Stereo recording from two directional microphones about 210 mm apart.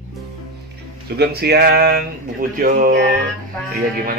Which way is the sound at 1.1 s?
50° right (ahead or behind).